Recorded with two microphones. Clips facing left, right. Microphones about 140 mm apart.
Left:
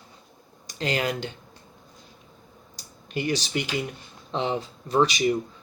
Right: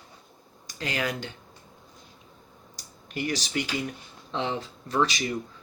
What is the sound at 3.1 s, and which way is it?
Speech, 20° left (ahead or behind).